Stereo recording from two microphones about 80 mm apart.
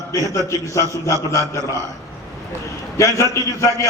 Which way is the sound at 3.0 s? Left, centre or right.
Left.